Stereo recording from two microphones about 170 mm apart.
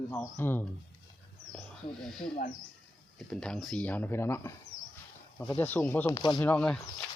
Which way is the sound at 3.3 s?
5° left (ahead or behind).